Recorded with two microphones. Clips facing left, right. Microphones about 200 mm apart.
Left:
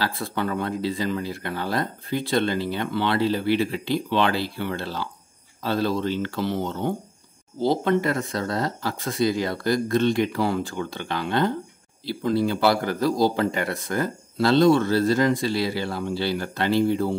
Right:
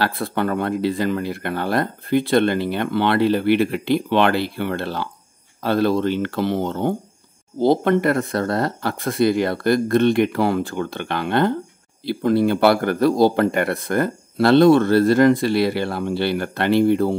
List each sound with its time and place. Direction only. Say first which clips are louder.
0.0 s speech: right 5 dB; 60° right (ahead or behind)